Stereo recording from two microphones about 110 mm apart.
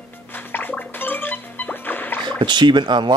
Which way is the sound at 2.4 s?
45° right (ahead or behind).